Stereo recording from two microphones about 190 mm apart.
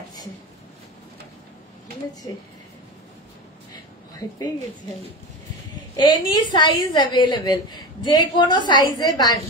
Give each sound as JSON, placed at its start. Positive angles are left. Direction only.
{"t": 5.9, "sound": "a woman's voice", "side_deg": 20}